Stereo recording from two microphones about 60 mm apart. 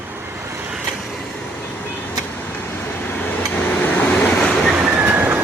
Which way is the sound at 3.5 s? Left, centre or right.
Left.